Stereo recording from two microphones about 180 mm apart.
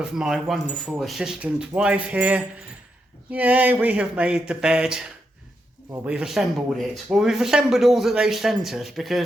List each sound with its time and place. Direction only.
0.0 s speech: 5° right (ahead or behind)
6.1 s speech: 5° right (ahead or behind)